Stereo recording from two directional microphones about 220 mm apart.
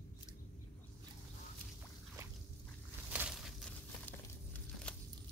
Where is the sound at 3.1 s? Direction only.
5° right (ahead or behind).